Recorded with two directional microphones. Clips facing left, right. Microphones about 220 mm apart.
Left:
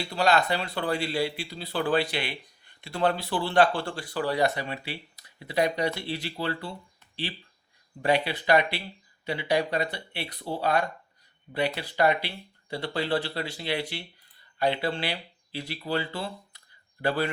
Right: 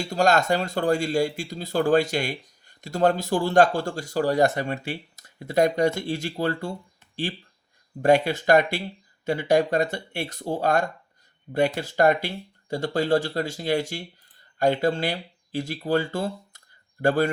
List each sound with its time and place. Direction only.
0.0 s speech: 45° right (ahead or behind)
8.0 s speech: 45° right (ahead or behind)